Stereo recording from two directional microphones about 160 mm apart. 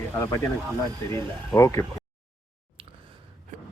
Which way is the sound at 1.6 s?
20° left (ahead or behind).